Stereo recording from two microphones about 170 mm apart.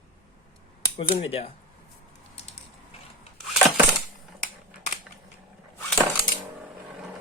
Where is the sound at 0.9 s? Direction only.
35° left (ahead or behind).